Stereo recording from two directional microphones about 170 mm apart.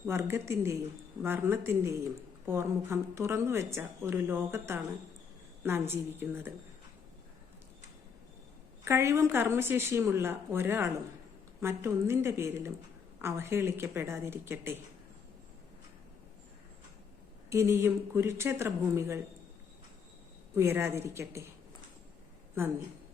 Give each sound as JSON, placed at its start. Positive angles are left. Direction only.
{"t": 0.0, "sound": "speech", "side_deg": -15}
{"t": 8.8, "sound": "speech", "side_deg": -15}
{"t": 17.5, "sound": "speech", "side_deg": -15}
{"t": 20.6, "sound": "speech", "side_deg": -15}
{"t": 22.6, "sound": "speech", "side_deg": -15}